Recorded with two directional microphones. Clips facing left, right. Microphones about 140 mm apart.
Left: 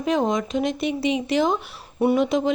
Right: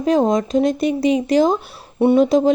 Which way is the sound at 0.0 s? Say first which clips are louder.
Right 6 dB; 35° right (ahead or behind).